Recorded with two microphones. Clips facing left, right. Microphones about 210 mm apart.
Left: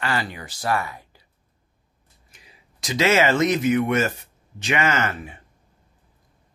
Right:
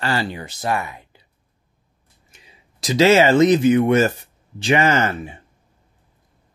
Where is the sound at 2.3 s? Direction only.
30° right (ahead or behind).